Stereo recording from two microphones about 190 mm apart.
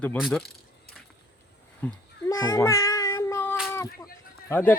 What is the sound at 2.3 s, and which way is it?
Cat, 15° left (ahead or behind).